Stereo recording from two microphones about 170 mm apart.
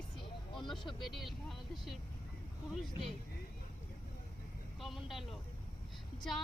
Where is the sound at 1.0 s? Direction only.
Centre (ahead or behind).